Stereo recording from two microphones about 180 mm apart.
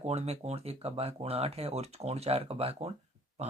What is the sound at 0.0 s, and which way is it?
Speech, 35° right (ahead or behind).